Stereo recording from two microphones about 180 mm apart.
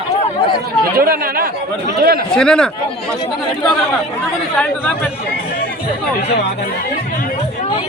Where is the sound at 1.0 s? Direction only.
55° right (ahead or behind).